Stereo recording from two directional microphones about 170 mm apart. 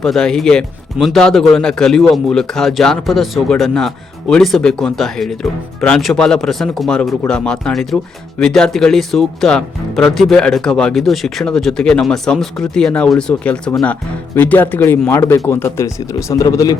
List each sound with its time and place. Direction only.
0.0 s a man's voice: 5° left (ahead or behind); by 16.7 s 20° left (ahead or behind)